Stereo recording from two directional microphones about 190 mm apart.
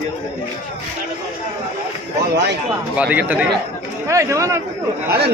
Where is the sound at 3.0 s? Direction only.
5° right (ahead or behind).